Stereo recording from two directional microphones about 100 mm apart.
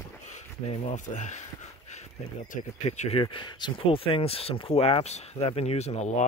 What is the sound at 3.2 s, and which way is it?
Speech, 50° left (ahead or behind).